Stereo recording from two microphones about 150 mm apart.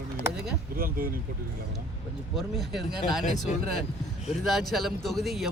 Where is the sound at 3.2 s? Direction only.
50° left (ahead or behind).